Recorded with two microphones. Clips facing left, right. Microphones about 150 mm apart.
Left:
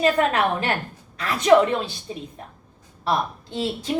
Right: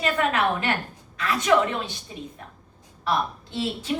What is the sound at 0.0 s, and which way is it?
A woman's voice, 35° left (ahead or behind).